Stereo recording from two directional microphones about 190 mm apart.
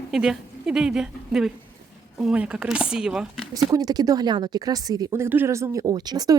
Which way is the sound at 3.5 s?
20° right (ahead or behind).